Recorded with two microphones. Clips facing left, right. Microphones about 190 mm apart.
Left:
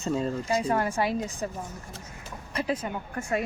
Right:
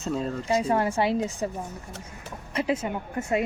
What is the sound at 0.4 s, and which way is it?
Speech, 20° right (ahead or behind).